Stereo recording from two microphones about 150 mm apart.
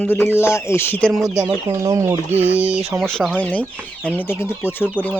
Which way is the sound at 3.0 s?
Centre (ahead or behind).